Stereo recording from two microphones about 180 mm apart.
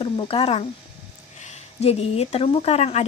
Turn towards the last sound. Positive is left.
turn(degrees=35)  # may be behind; listen again after turning